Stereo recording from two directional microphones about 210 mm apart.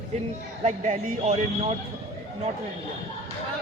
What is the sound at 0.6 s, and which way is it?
Speech, 30° right (ahead or behind).